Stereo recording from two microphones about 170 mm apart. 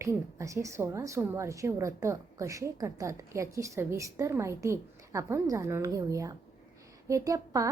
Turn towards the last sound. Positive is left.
turn(degrees=-20)  # may be behind; listen again after turning